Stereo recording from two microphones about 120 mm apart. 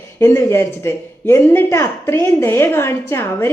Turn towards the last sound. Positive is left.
turn(degrees=20)  # may be behind; listen again after turning